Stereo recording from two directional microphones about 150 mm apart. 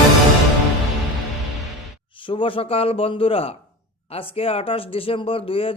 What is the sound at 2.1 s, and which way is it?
Speech, 35° left (ahead or behind).